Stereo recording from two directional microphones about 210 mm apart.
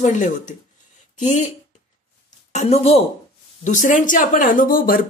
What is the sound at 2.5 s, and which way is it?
Speech, 30° left (ahead or behind).